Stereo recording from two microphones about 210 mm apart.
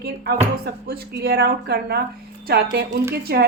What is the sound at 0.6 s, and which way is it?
A woman's voice, 50° right (ahead or behind).